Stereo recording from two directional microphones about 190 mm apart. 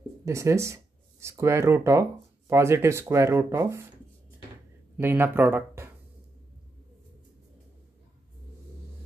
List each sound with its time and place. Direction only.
0.2 s speech: 15° right (ahead or behind)
4.9 s speech: 10° right (ahead or behind)